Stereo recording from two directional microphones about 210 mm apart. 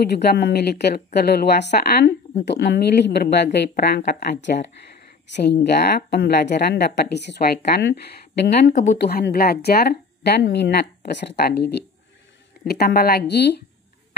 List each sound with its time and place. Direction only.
0.1 s a woman's voice: 50° left (ahead or behind)